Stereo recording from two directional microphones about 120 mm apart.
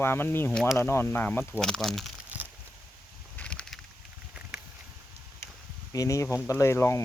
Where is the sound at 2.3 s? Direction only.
15° right (ahead or behind).